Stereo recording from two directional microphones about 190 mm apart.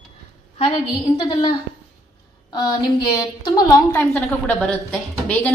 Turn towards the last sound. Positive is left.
turn(degrees=5)  # may be behind; listen again after turning